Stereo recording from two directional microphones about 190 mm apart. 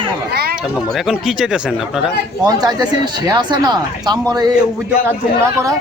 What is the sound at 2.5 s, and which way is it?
Speech, 20° right (ahead or behind).